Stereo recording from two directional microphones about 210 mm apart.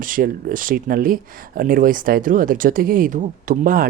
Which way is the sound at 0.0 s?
40° right (ahead or behind).